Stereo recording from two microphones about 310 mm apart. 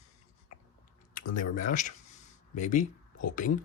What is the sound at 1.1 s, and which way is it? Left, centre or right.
Speech, left.